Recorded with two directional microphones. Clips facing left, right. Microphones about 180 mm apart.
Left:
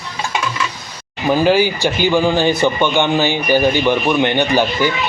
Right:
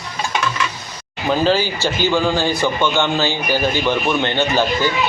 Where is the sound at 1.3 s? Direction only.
15° left (ahead or behind).